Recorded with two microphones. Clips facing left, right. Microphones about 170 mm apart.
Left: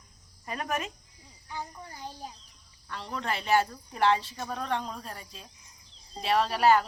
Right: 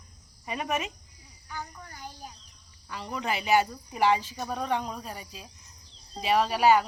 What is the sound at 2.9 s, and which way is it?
Speech, 5° right (ahead or behind).